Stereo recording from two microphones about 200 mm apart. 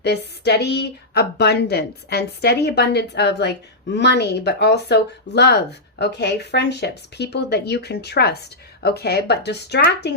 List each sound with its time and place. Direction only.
0.0 s speech: 55° left (ahead or behind)